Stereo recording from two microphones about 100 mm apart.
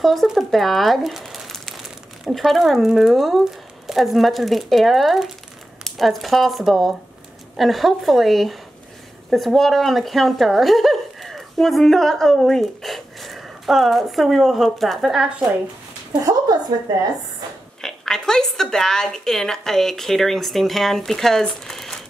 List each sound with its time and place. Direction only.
0.0 s speech: centre (ahead or behind)
16.1 s a woman's voice: 35° right (ahead or behind)
17.8 s speech: 5° left (ahead or behind)